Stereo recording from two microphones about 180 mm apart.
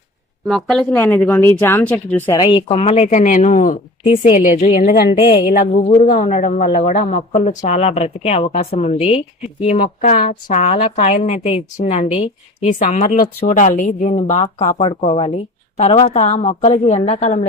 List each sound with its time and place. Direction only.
0.4 s speech: centre (ahead or behind)
2.4 s a woman's voice: 30° left (ahead or behind)